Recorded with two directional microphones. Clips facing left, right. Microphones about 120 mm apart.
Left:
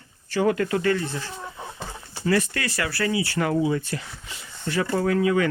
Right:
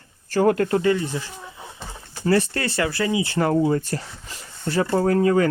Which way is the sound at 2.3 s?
30° right (ahead or behind).